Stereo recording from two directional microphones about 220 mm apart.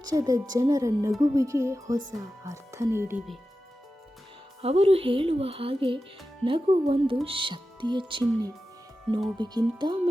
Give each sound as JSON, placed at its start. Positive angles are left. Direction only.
{"t": 0.0, "sound": "speech", "side_deg": -15}
{"t": 4.6, "sound": "a woman's voice", "side_deg": -30}